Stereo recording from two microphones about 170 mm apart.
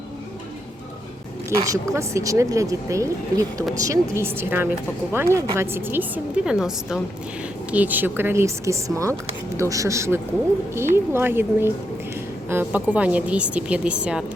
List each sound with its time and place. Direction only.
1.6 s a woman's voice: 20° right (ahead or behind)